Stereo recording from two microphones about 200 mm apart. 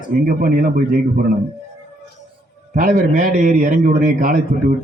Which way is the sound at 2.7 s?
40° right (ahead or behind).